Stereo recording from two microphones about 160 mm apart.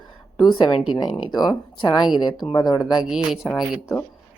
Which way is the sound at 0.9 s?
30° left (ahead or behind).